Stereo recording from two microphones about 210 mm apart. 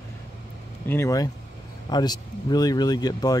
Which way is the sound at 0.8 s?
10° left (ahead or behind).